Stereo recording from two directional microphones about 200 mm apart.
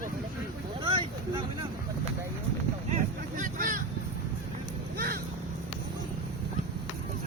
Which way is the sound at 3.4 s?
45° right (ahead or behind).